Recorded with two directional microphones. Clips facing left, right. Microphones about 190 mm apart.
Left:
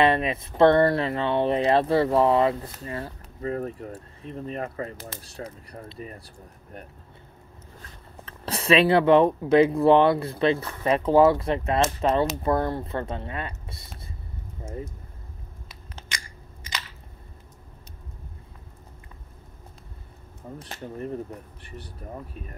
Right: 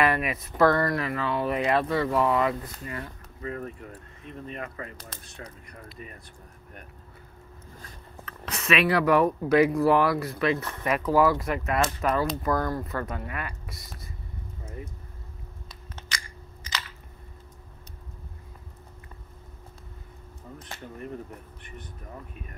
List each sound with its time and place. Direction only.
0.0 s speech: 25° left (ahead or behind)
8.3 s speech: 30° left (ahead or behind)
14.6 s a sound: 25° left (ahead or behind)
20.5 s speech: 35° left (ahead or behind)